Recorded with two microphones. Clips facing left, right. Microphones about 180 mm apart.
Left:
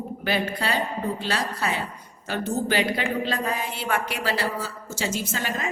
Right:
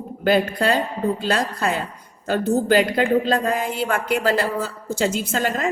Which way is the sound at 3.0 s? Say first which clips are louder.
Right 8 dB; 50° right (ahead or behind).